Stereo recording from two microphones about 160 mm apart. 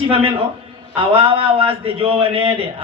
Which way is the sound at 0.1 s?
35° right (ahead or behind).